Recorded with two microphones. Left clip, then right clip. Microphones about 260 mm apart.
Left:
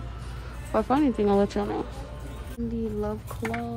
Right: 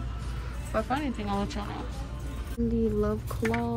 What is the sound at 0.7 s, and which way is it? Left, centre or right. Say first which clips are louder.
Speech: left 6 dB; left.